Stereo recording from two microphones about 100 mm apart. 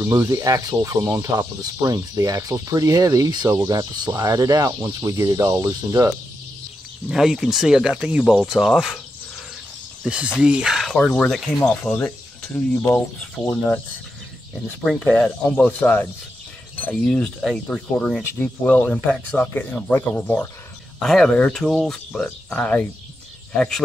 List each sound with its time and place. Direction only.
0.0 s speech: 30° right (ahead or behind)
7.1 s speech: 5° right (ahead or behind)
10.0 s speech: 10° right (ahead or behind)
11.6 s speech: 15° left (ahead or behind)
15.0 s speech: 20° left (ahead or behind)
21.0 s speech: 5° left (ahead or behind)